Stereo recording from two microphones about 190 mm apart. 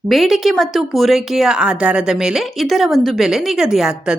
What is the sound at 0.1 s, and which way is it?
A woman's voice, centre (ahead or behind).